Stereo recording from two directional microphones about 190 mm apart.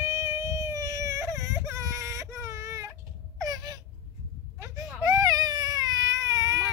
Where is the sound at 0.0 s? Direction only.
15° right (ahead or behind).